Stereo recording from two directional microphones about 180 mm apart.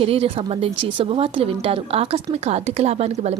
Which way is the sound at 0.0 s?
30° right (ahead or behind).